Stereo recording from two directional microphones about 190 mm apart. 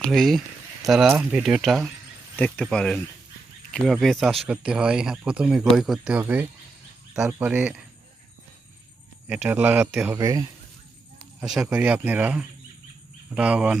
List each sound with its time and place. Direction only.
0.0 s speech: centre (ahead or behind)
9.2 s speech: 10° right (ahead or behind)
10.2 s speech: 20° right (ahead or behind)
11.3 s speech: 5° right (ahead or behind)